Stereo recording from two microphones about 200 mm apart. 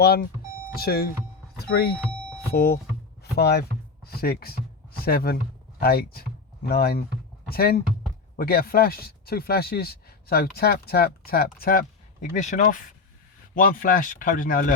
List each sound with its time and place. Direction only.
0.0 s speech: 50° left (ahead or behind)
2.5 s speech: 50° left (ahead or behind)